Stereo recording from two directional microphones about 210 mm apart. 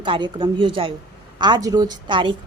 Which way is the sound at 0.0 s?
20° right (ahead or behind).